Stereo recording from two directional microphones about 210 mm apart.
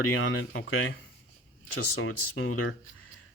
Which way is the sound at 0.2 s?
70° left (ahead or behind).